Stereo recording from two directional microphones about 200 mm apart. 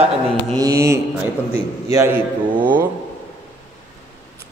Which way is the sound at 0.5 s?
15° right (ahead or behind).